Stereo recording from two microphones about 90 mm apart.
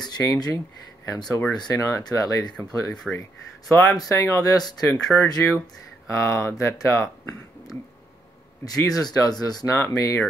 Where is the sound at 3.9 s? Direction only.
40° left (ahead or behind).